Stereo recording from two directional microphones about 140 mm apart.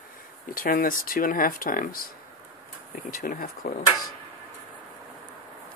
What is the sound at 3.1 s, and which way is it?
Speech, 90° left.